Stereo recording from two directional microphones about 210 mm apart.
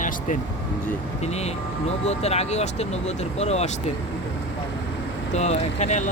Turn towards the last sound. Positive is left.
turn(degrees=35)  # may be behind; listen again after turning